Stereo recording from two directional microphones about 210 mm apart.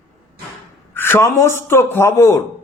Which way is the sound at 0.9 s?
10° left (ahead or behind).